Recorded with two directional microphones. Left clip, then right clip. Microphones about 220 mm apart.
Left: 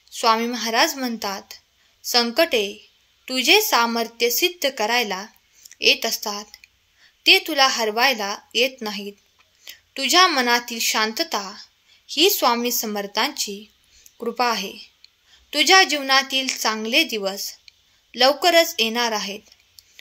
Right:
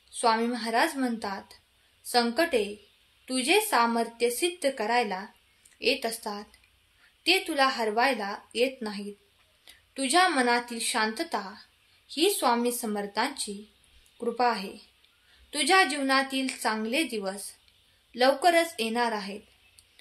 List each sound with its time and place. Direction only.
0.1 s a woman's voice: 35° left (ahead or behind)